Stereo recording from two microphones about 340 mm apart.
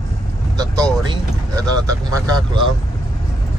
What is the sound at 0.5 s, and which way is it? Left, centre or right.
Speech, centre.